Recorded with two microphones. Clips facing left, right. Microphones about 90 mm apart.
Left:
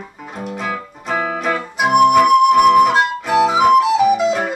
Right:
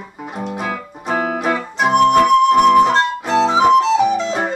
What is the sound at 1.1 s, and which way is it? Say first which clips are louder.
Music: right 1 dB; 20° right (ahead or behind).